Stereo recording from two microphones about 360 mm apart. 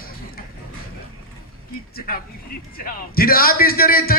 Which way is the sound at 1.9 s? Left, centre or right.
Left.